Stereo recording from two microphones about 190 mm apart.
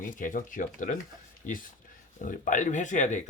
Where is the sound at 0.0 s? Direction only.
45° left (ahead or behind).